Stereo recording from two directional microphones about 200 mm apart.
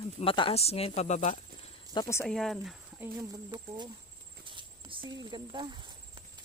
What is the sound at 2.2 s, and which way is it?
Speech, centre (ahead or behind).